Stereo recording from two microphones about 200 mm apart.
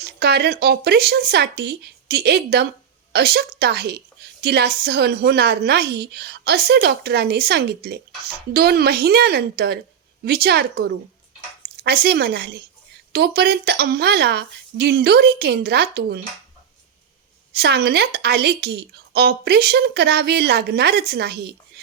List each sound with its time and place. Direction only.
0.0 s a woman's voice: 55° right (ahead or behind)
17.5 s a woman's voice: 55° right (ahead or behind)